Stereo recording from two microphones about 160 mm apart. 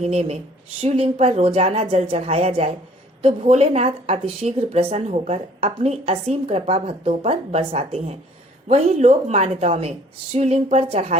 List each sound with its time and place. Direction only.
0.0 s a woman's voice: 40° right (ahead or behind)